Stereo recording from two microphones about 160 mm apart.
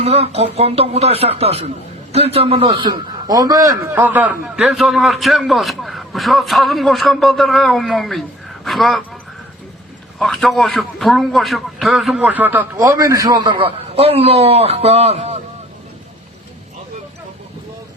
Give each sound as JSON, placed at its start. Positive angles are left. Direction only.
{"t": 0.0, "sound": "a man's voice", "side_deg": -40}
{"t": 10.2, "sound": "a man's voice", "side_deg": 0}
{"t": 12.7, "sound": "a man's voice", "side_deg": -20}